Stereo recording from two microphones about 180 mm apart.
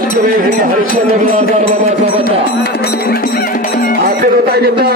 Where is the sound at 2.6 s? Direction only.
60° left (ahead or behind).